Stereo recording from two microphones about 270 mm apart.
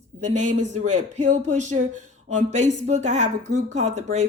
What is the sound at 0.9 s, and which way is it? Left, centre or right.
Speech, right.